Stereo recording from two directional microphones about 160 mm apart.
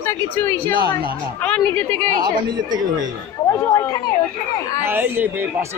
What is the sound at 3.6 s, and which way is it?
Speech, 15° left (ahead or behind).